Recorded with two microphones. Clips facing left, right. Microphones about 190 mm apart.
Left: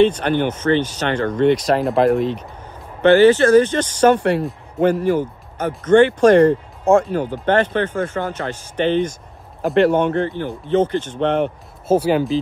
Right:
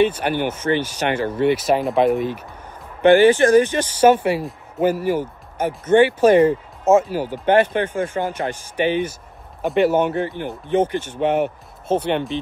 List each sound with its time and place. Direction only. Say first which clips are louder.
0.0 s speech: left 3 dB; 10° right (ahead or behind)
3.0 s speech: left 1 dB; 15° right (ahead or behind)
11.9 s speech: left 4 dB; 5° left (ahead or behind)